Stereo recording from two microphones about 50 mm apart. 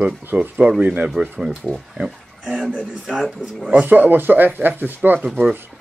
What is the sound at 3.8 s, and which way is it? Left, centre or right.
Speech, right.